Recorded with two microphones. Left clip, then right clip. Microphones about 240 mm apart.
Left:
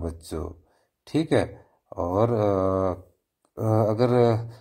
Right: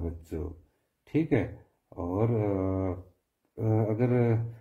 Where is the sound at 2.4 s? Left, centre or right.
Left.